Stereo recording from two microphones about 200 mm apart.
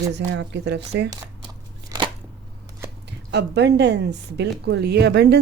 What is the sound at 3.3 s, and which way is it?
Speech, 55° right (ahead or behind).